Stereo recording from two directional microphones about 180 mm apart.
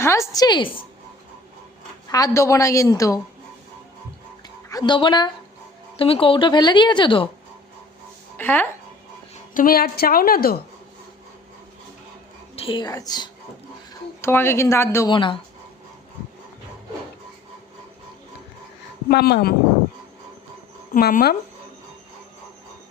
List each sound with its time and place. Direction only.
0.0 s a woman's voice: 15° left (ahead or behind)
2.0 s a woman's voice: 20° left (ahead or behind)
4.7 s a woman's voice: 25° left (ahead or behind)
8.4 s a woman's voice: 10° left (ahead or behind)
9.6 s a woman's voice: 55° left (ahead or behind)
12.5 s a woman's voice: 30° left (ahead or behind)
15.1 s a woman's voice: 25° left (ahead or behind)
19.0 s a woman's voice: 60° left (ahead or behind)
20.9 s a woman's voice: 50° left (ahead or behind)